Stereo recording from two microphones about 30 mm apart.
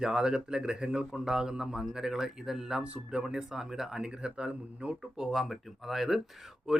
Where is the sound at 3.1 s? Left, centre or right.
Right.